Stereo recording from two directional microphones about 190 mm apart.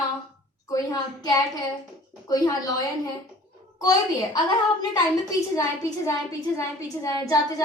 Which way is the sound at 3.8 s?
20° left (ahead or behind).